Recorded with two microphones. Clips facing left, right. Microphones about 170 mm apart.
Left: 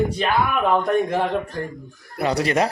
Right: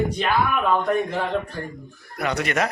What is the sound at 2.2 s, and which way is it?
Speech, 30° left (ahead or behind).